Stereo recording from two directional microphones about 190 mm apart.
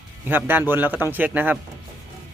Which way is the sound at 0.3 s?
10° right (ahead or behind).